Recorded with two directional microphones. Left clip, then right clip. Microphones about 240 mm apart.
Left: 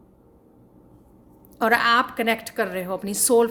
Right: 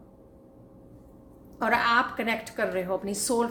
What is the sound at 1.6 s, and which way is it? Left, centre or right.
A woman's voice, left.